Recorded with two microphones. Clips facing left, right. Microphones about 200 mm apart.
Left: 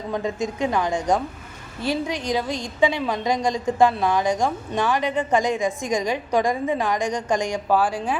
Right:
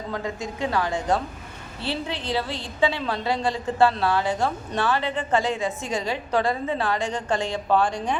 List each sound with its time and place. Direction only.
0.1 s a woman's voice: 20° left (ahead or behind)